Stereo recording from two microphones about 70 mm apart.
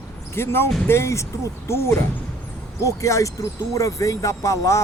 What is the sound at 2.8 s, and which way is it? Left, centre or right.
Speech, left.